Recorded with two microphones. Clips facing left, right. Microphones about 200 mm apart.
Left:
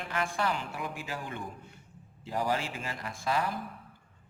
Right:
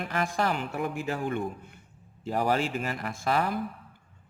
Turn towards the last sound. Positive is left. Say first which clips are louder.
# right 4 dB
turn(degrees=-60)  # may be behind; listen again after turning